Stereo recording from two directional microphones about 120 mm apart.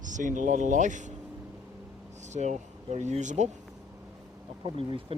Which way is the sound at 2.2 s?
80° right.